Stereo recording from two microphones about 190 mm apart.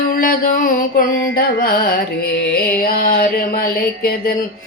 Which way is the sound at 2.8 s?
50° left (ahead or behind).